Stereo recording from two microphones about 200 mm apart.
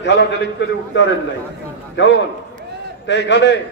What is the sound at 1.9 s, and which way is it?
A man's voice, 65° left (ahead or behind).